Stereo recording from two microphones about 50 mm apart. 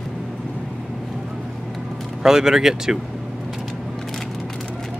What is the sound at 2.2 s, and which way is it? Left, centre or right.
Speech, centre.